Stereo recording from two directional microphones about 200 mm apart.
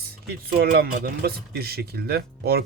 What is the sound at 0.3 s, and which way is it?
Speech, 55° right (ahead or behind).